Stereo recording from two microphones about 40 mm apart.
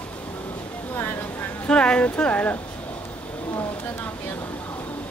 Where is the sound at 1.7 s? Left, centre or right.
Left.